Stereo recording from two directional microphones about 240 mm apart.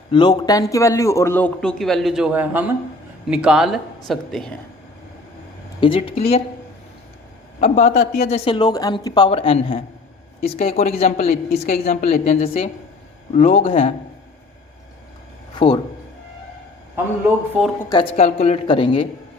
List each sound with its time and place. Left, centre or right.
0.1 s a man's voice: centre
5.8 s speech: left
7.6 s speech: left
10.4 s a woman's voice: left
15.5 s speech: centre
17.8 s speech: centre